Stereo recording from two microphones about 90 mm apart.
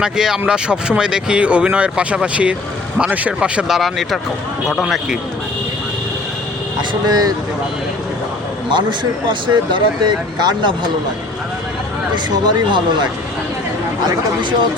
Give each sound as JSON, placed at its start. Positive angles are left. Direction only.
{"t": 0.0, "sound": "speech", "side_deg": -5}
{"t": 3.8, "sound": "speech", "side_deg": 0}
{"t": 7.0, "sound": "speech", "side_deg": -50}
{"t": 8.7, "sound": "speech", "side_deg": -60}
{"t": 12.1, "sound": "speech", "side_deg": -60}